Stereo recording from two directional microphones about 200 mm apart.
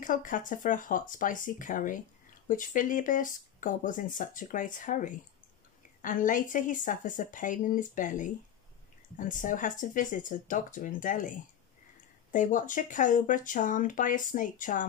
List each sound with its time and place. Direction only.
0.0 s speech: 40° left (ahead or behind)